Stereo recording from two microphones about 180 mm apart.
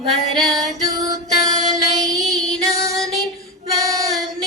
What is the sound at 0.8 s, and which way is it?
Female singing, 20° right (ahead or behind).